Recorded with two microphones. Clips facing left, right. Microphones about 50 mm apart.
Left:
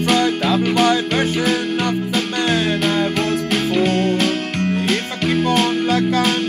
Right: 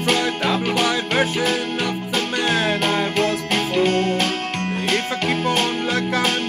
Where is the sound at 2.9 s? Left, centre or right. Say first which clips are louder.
Left 2 dB; right.